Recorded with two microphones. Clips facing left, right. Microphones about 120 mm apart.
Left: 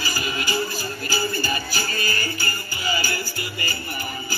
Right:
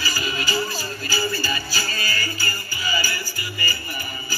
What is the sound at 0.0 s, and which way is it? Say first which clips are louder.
Music: even; 55° left (ahead or behind).